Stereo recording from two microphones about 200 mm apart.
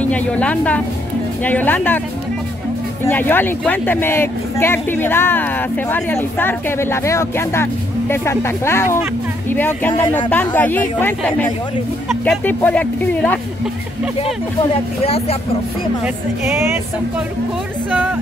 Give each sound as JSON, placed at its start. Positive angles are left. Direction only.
{"t": 0.0, "sound": "speech", "side_deg": 5}
{"t": 3.1, "sound": "speech", "side_deg": 10}
{"t": 15.0, "sound": "speech", "side_deg": 30}